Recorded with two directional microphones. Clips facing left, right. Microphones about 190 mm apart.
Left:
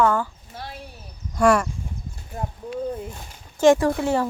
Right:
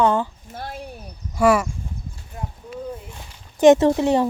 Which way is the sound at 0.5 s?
50° right (ahead or behind).